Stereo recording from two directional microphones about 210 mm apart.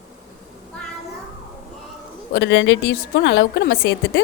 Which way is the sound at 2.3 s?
60° left (ahead or behind).